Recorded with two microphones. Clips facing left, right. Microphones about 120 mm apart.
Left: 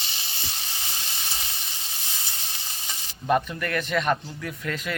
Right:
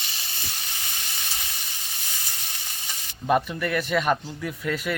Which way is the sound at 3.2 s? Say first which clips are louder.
Right 1 dB; 5° right (ahead or behind).